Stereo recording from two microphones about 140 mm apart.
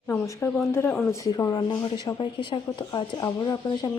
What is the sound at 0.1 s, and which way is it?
Speech, 15° left (ahead or behind).